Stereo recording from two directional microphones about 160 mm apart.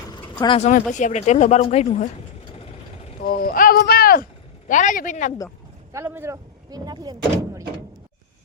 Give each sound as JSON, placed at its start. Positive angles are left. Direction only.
{"t": 0.4, "sound": "speech", "side_deg": 35}
{"t": 0.7, "sound": "speech", "side_deg": 50}
{"t": 3.2, "sound": "speech", "side_deg": 65}
{"t": 4.7, "sound": "speech", "side_deg": 50}
{"t": 5.9, "sound": "speech", "side_deg": -15}